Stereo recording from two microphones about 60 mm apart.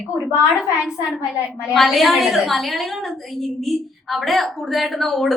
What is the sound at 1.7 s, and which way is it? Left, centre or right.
A woman's voice, centre.